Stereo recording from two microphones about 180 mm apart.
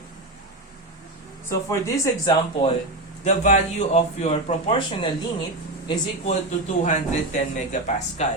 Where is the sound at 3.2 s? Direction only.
40° left (ahead or behind).